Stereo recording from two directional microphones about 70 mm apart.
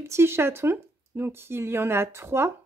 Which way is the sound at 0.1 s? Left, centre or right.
Right.